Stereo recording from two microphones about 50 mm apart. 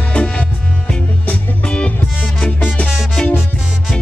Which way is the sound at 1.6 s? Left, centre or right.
Centre.